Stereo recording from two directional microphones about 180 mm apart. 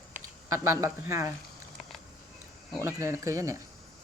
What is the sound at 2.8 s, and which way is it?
Speech, 15° right (ahead or behind).